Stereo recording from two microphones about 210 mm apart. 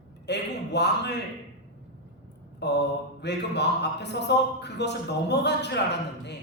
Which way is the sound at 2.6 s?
55° left (ahead or behind).